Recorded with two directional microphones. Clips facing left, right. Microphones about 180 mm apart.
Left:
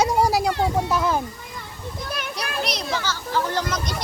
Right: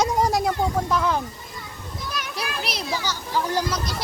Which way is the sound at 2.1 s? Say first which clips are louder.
Left 1 dB; 55° left (ahead or behind).